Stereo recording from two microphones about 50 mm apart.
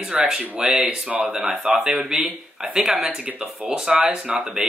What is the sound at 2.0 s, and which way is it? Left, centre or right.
Speech, centre.